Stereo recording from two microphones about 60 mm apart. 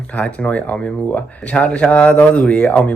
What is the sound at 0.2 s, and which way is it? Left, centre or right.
Speech, left.